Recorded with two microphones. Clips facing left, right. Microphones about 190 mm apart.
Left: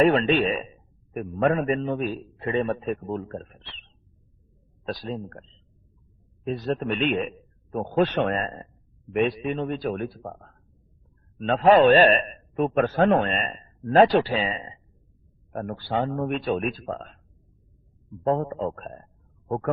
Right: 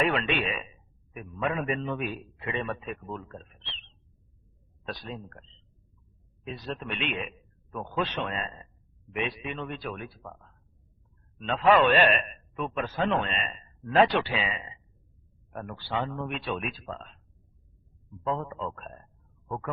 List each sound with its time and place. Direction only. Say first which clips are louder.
0.0 s a man's voice: left 8 dB; 40° left (ahead or behind)
4.9 s a man's voice: left 7 dB; 35° left (ahead or behind)
18.2 s a man's voice: left 7 dB; 50° left (ahead or behind)